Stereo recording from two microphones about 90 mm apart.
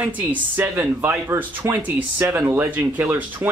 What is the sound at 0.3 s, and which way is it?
Speech, 20° right (ahead or behind).